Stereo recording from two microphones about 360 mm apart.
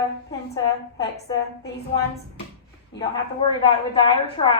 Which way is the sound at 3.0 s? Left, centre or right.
Centre.